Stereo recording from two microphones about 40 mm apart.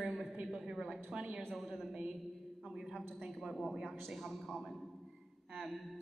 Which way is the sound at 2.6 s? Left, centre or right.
Centre.